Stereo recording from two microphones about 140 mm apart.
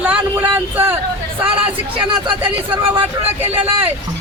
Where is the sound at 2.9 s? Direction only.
45° right (ahead or behind).